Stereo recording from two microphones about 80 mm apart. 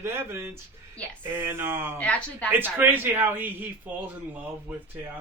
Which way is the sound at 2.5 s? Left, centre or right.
Right.